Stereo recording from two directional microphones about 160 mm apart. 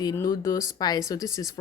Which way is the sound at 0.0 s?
25° left (ahead or behind).